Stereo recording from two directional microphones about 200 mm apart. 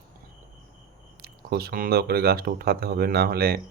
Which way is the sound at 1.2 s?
50° right (ahead or behind).